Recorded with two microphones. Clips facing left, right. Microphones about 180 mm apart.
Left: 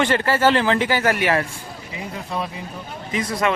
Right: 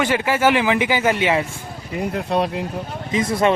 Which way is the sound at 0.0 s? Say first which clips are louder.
Even; 10° right (ahead or behind).